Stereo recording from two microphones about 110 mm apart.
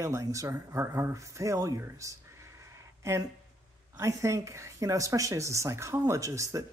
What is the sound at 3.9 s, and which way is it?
Speech, 25° right (ahead or behind).